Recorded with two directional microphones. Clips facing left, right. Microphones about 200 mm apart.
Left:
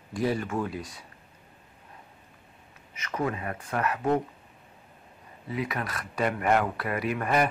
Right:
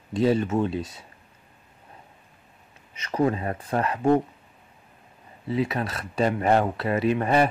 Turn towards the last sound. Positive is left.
turn(degrees=-25)  # may be behind; listen again after turning